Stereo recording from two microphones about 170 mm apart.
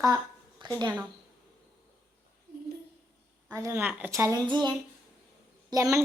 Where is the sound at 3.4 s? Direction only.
15° right (ahead or behind).